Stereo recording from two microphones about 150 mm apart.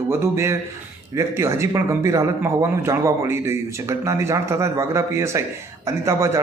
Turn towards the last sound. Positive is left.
turn(degrees=-20)  # may be behind; listen again after turning